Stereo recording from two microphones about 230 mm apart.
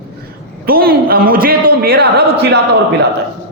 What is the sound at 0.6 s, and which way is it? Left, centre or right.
A man's voice, right.